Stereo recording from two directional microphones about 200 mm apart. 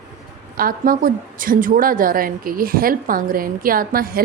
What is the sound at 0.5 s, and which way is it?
A woman's voice, 45° right (ahead or behind).